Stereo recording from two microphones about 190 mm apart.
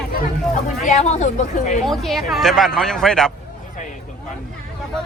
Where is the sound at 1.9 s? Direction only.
Centre (ahead or behind).